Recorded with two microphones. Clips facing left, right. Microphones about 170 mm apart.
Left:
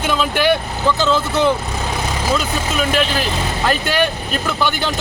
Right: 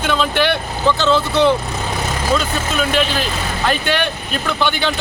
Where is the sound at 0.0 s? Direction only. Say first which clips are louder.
Even; 10° left (ahead or behind).